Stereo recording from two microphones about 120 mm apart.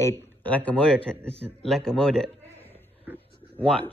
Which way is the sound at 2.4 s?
15° left (ahead or behind).